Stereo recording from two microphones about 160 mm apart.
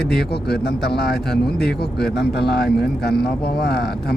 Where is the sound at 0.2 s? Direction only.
90° left.